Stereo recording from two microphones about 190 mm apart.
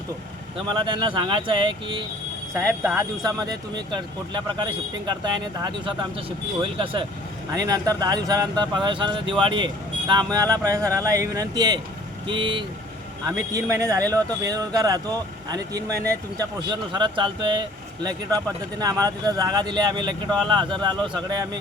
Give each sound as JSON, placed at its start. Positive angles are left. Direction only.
{"t": 0.7, "sound": "speech", "side_deg": -25}
{"t": 2.6, "sound": "speech", "side_deg": -15}